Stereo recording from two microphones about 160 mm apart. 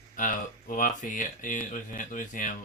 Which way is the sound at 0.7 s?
55° left (ahead or behind).